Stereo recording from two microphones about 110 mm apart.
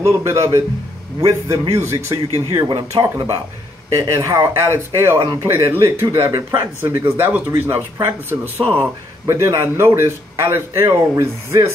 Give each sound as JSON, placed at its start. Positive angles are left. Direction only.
{"t": 0.0, "sound": "a man's voice", "side_deg": -25}